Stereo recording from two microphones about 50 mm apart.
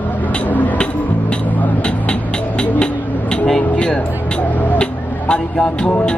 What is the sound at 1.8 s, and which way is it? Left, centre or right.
Music, centre.